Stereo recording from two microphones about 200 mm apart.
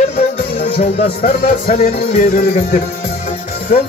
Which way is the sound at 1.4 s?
45° left (ahead or behind).